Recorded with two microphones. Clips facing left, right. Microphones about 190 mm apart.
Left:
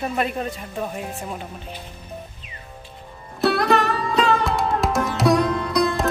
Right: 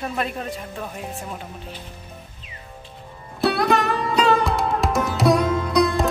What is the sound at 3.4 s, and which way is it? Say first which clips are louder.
Music: left 1 dB; centre (ahead or behind).